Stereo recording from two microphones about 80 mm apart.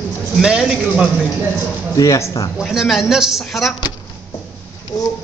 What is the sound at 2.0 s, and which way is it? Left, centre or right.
Speech, left.